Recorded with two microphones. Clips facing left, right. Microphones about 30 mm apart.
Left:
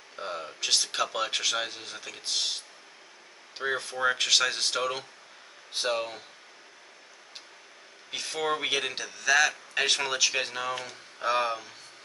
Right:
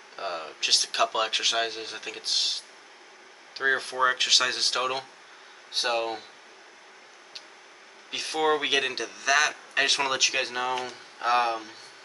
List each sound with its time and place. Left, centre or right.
0.1 s speech: right
4.0 s speech: centre
8.1 s speech: centre